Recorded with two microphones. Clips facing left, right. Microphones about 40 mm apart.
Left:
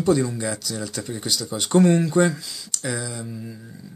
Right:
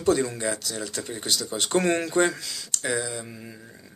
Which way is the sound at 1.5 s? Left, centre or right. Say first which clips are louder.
Left 5 dB; centre.